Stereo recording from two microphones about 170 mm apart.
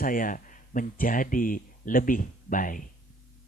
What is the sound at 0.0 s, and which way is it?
Speech, 55° left (ahead or behind).